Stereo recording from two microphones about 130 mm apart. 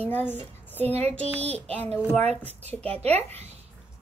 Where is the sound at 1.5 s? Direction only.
50° right (ahead or behind).